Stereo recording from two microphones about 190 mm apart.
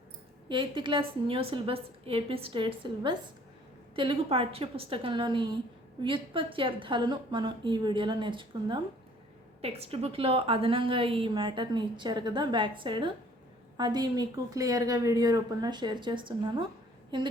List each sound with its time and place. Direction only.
0.4 s a woman's voice: 25° right (ahead or behind)